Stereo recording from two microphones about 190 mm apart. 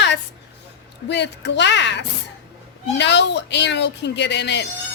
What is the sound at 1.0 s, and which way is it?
A woman's voice, 65° left (ahead or behind).